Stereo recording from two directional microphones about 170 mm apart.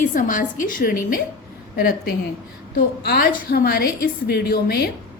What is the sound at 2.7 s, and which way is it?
A woman's voice, 70° left (ahead or behind).